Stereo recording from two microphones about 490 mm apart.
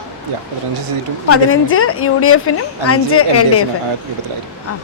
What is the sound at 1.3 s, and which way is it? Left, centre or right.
A woman's voice, left.